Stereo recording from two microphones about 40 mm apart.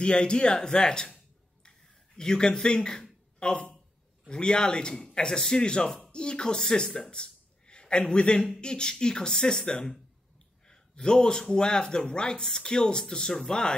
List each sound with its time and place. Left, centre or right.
0.0 s speech: left
1.6 s a sound: centre
4.3 s speech: left
7.1 s a sound: left
8.1 s speech: left
10.7 s speech: centre